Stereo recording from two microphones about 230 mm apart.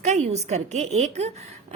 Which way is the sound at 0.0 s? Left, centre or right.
Right.